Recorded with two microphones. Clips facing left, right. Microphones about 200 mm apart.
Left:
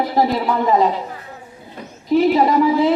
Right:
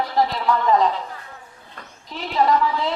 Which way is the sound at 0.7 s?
10° left (ahead or behind).